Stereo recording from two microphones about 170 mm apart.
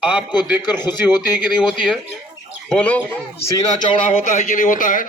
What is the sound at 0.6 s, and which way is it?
Speech, 25° left (ahead or behind).